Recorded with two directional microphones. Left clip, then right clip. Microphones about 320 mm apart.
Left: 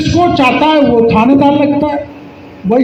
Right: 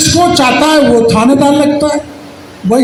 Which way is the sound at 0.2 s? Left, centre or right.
Right.